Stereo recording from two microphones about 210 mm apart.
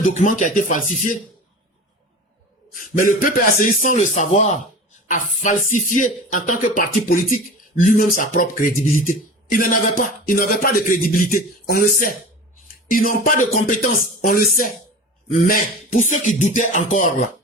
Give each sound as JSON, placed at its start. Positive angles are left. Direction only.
{"t": 0.1, "sound": "a man's voice", "side_deg": 35}
{"t": 2.7, "sound": "a man's voice", "side_deg": 40}